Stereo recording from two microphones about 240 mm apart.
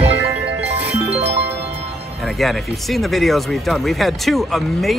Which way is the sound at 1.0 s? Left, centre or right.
Right.